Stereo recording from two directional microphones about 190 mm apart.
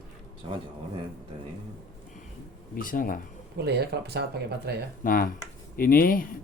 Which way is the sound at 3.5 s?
60° right (ahead or behind).